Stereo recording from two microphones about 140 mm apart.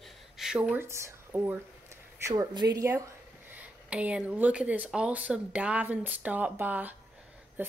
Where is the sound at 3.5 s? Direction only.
10° right (ahead or behind).